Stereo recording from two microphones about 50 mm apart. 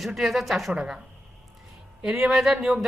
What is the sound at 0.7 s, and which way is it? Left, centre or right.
Speech, centre.